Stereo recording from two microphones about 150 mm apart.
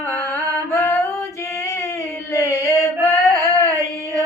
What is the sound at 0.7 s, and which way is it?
Music, 15° left (ahead or behind).